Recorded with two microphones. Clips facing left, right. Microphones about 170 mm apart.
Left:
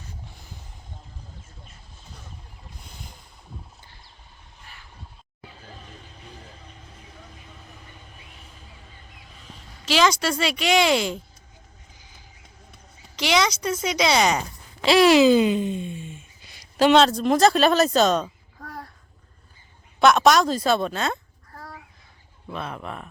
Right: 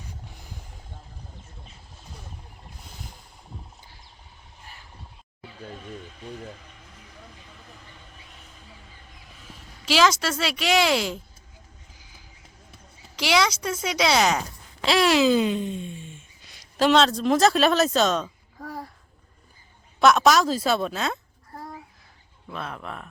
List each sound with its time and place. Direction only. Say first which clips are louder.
9.8 s speech: even; 5° right (ahead or behind)
12.7 s a woman's voice: left 1 dB; 5° right (ahead or behind)
18.6 s babbling: right 3 dB; 10° right (ahead or behind)
20.0 s speech: left 1 dB; centre (ahead or behind)
21.5 s a sound: right 3 dB; 25° right (ahead or behind)
22.5 s speech: left 2 dB; centre (ahead or behind)